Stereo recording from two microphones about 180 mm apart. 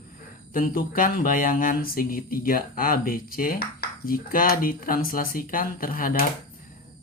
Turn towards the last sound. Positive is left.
turn(degrees=50)  # may be behind; listen again after turning